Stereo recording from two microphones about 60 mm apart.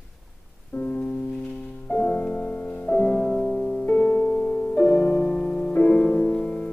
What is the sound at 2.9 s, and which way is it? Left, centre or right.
Music, left.